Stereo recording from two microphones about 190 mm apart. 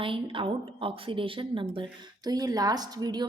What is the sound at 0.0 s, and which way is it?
Speech, 25° right (ahead or behind).